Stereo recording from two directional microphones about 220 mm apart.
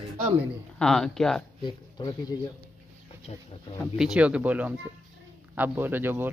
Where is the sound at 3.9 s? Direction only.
5° right (ahead or behind).